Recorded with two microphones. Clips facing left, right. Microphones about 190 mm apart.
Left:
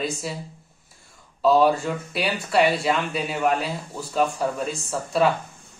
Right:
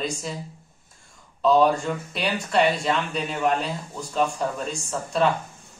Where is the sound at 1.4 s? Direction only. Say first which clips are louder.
Left 1 dB; 5° left (ahead or behind).